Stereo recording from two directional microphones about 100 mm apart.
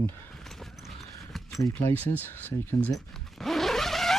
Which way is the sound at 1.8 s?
15° left (ahead or behind).